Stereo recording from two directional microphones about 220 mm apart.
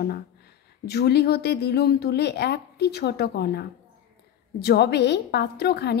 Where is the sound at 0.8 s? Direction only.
45° left (ahead or behind).